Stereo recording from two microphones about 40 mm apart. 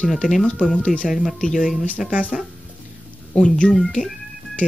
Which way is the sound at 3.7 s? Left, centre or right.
Centre.